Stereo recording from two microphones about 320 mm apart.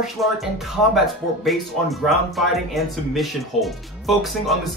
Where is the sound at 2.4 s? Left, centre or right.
Centre.